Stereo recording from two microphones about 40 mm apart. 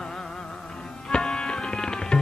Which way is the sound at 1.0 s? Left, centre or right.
Centre.